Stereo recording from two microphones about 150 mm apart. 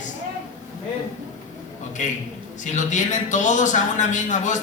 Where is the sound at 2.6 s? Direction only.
55° left (ahead or behind).